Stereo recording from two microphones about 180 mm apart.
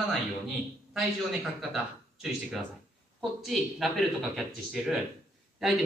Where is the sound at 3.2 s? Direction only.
Centre (ahead or behind).